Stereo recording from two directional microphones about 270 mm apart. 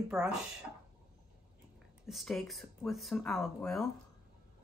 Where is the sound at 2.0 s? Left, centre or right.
Centre.